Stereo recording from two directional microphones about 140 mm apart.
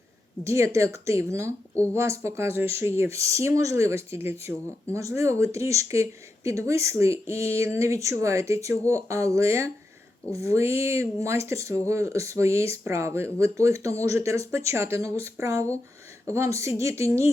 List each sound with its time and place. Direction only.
0.4 s speech: 20° right (ahead or behind)
1.7 s speech: 10° left (ahead or behind)
2.0 s speech: 20° right (ahead or behind)